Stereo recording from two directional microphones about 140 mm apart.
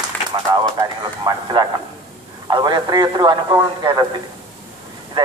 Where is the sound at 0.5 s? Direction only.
25° right (ahead or behind).